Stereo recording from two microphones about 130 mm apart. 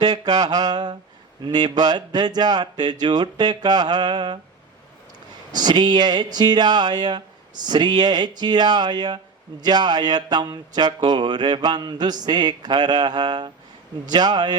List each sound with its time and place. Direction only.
0.0 s speech: 30° right (ahead or behind)
5.5 s speech: 35° right (ahead or behind)